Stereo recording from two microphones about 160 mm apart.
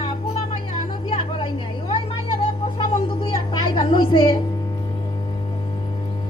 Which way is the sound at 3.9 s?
30° left (ahead or behind).